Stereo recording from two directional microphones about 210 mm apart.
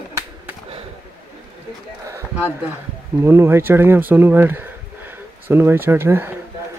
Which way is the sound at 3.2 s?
10° right (ahead or behind).